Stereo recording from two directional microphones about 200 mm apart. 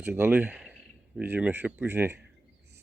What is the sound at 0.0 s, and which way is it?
Speech, 10° right (ahead or behind).